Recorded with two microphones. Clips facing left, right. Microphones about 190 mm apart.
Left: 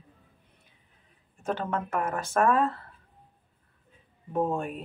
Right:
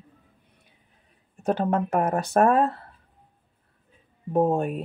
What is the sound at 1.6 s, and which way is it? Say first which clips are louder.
Speech: right 7 dB; 40° right (ahead or behind).